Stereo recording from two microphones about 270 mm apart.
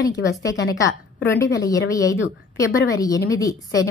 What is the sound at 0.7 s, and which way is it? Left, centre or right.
A woman's voice, centre.